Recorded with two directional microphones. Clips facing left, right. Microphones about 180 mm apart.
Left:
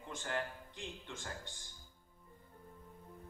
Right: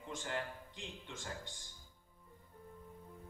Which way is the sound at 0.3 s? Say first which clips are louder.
Left 3 dB; 50° left (ahead or behind).